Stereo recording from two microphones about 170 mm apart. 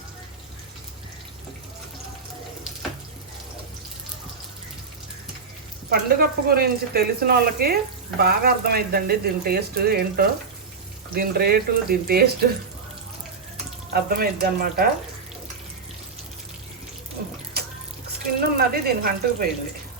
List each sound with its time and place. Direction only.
5.9 s speech: 65° right (ahead or behind)
13.9 s speech: 65° right (ahead or behind)
17.6 s water: 70° right (ahead or behind)
18.3 s speech: 60° right (ahead or behind)